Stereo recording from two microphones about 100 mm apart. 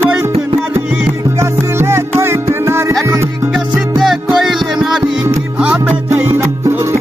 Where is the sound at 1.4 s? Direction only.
25° right (ahead or behind).